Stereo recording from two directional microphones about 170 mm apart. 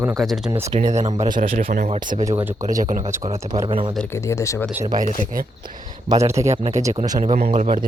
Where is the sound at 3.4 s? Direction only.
20° right (ahead or behind).